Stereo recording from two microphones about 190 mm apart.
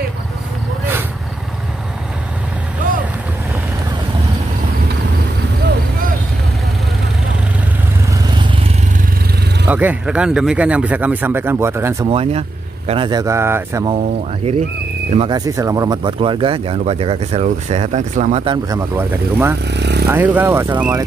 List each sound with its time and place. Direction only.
9.7 s speech: 10° right (ahead or behind)
12.1 s speech: 30° right (ahead or behind); by 13.8 s 10° right (ahead or behind)
15.0 s speech: 30° right (ahead or behind)
15.3 s speech: 20° right (ahead or behind); by 18.4 s 40° right (ahead or behind)
18.4 s speech: 20° right (ahead or behind)
19.7 s speech: 60° right (ahead or behind)
20.1 s speech: 10° right (ahead or behind)